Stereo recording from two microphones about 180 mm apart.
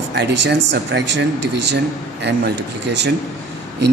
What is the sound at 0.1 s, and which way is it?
Speech, 70° right (ahead or behind).